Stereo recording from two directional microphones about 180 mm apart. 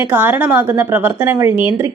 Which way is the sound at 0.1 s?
10° right (ahead or behind).